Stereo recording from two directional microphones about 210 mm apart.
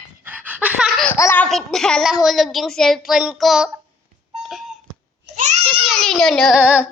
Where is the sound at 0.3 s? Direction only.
5° right (ahead or behind).